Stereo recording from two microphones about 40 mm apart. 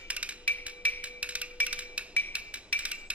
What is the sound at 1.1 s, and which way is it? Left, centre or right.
Music, right.